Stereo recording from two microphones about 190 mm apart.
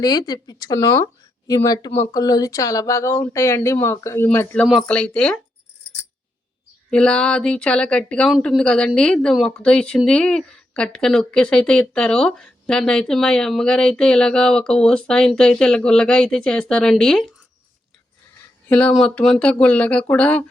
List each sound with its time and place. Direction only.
0.0 s speech: 20° left (ahead or behind); by 5.4 s 5° left (ahead or behind)
6.9 s a woman's voice: 5° left (ahead or behind)
18.7 s speech: 5° left (ahead or behind)